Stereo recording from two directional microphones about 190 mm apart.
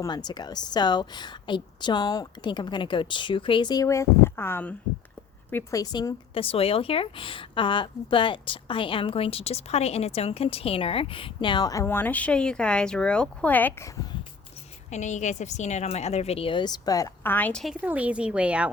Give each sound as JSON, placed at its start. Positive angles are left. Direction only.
{"t": 0.0, "sound": "speech", "side_deg": 20}
{"t": 14.8, "sound": "speech", "side_deg": 40}